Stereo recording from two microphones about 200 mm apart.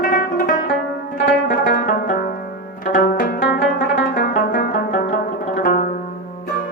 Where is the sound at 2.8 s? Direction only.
45° left (ahead or behind).